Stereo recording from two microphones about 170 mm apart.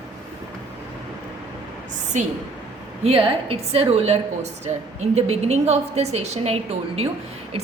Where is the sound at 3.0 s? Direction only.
35° right (ahead or behind).